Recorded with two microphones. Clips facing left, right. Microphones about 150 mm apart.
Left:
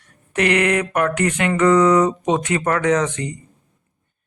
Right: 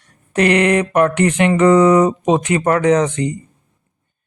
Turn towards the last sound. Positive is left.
turn(degrees=-30)  # may be behind; listen again after turning